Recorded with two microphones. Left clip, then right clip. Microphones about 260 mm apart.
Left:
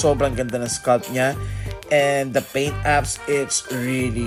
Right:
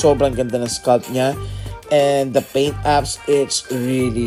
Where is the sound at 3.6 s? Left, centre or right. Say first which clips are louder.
Right 4 dB; centre.